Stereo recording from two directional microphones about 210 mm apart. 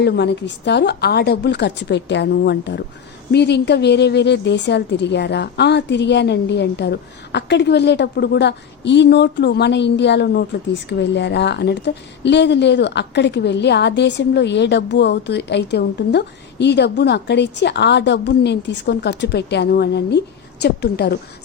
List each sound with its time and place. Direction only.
0.0 s a woman's voice: 55° left (ahead or behind)